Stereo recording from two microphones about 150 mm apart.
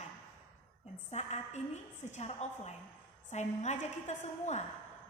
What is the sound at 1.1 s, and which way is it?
A woman's voice, 50° left (ahead or behind).